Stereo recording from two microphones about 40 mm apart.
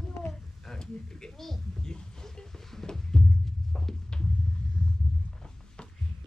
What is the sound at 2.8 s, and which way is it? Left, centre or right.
Music, centre.